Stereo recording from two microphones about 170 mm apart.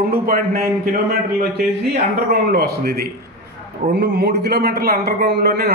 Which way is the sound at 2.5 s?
70° right (ahead or behind).